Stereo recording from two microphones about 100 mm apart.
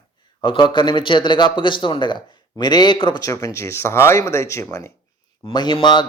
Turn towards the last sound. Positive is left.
turn(degrees=45)  # may be behind; listen again after turning